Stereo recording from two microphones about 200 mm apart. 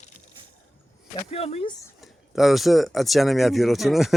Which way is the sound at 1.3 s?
30° left (ahead or behind).